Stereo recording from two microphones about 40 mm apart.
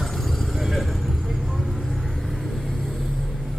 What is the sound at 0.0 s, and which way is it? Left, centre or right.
Vehicle, centre.